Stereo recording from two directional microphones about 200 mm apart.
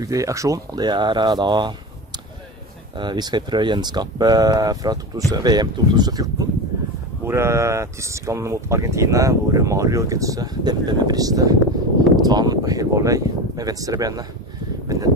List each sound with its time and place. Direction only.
0.0 s speech: 15° right (ahead or behind)
3.0 s speech: 20° right (ahead or behind)